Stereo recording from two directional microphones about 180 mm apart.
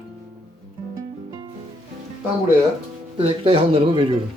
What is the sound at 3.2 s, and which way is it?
Speech, 30° right (ahead or behind).